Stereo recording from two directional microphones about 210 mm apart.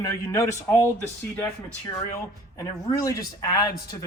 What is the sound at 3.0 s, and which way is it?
Speech, 15° left (ahead or behind).